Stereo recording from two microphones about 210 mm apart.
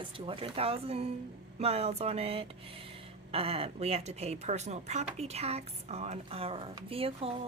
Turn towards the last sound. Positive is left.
turn(degrees=-25)  # may be behind; listen again after turning